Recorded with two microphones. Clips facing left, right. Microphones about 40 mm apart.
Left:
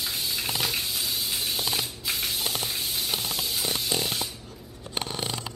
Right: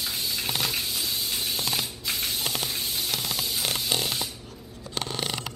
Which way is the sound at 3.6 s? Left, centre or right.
Right.